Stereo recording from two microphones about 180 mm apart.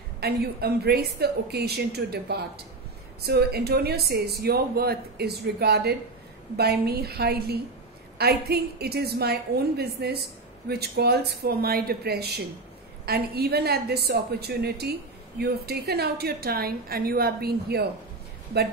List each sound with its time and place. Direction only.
0.2 s a woman's voice: 60° right (ahead or behind)